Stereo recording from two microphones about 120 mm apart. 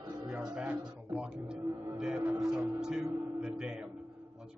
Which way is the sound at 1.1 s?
10° right (ahead or behind).